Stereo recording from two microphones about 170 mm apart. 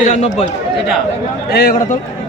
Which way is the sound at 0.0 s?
40° left (ahead or behind).